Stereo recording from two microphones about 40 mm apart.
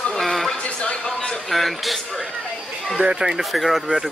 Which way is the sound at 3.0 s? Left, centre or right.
Right.